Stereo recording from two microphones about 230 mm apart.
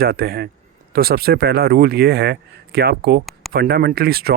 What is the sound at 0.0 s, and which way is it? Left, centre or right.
A man's voice, right.